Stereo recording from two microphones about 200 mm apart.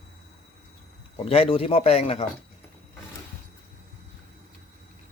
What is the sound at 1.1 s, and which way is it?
Speech, 30° left (ahead or behind).